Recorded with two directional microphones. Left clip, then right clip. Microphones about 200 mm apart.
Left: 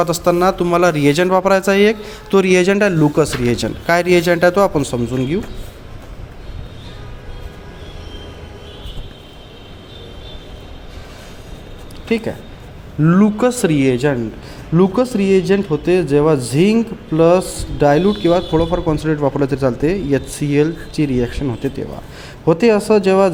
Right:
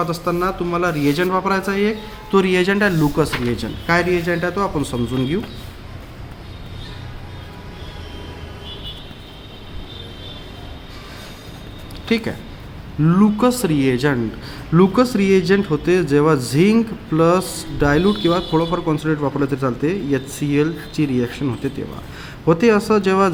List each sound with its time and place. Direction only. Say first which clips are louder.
0.0 s speech: left 6 dB; 45° left (ahead or behind)
4.8 s speech: left 3 dB; 25° left (ahead or behind)
12.0 s a man's voice: left 2 dB; 5° left (ahead or behind)